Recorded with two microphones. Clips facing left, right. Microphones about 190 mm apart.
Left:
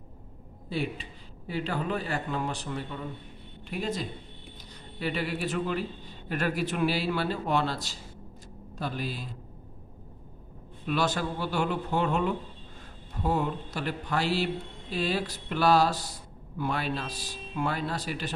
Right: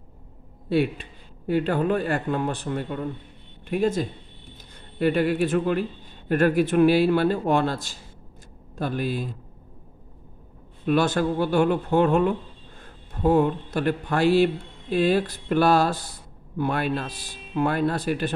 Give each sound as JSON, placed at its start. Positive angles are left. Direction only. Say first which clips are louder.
{"t": 0.7, "sound": "a man's voice", "louder": "right 9 dB", "side_deg": -65}
{"t": 10.9, "sound": "a man's voice", "louder": "right 7 dB", "side_deg": -50}